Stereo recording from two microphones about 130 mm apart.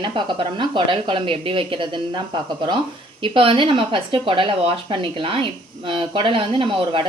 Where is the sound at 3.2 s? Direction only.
40° right (ahead or behind).